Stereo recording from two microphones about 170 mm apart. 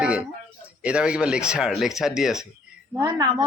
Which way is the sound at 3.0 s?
20° right (ahead or behind).